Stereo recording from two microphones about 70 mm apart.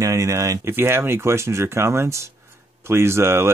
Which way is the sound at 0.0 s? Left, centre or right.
Right.